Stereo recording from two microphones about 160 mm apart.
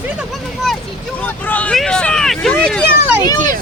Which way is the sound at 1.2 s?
10° left (ahead or behind).